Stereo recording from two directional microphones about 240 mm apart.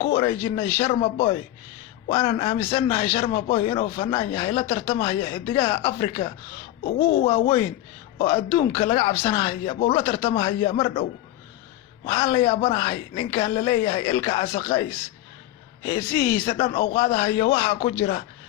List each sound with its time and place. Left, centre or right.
0.0 s speech: left
12.0 s speech: left